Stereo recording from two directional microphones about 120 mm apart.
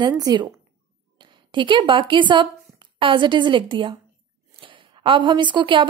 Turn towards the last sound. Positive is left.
turn(degrees=-40)  # may be behind; listen again after turning